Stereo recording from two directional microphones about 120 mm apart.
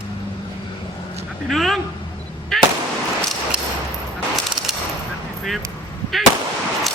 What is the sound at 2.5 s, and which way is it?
Fireworks, centre (ahead or behind).